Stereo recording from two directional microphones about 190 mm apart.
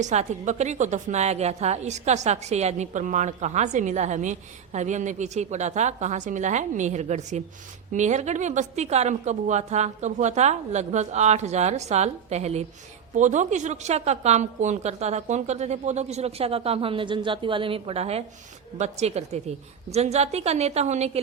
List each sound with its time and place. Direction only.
0.0 s a woman's voice: 40° right (ahead or behind)